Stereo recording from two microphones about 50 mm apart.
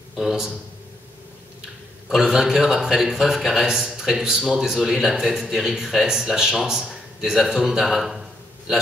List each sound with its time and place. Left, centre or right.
0.1 s a man's voice: centre
2.0 s speech: centre